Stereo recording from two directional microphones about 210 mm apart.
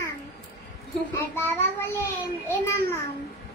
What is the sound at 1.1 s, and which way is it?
A woman's voice, 10° left (ahead or behind).